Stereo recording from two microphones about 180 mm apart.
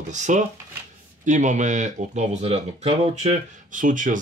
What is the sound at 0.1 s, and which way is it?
Speech, 40° right (ahead or behind).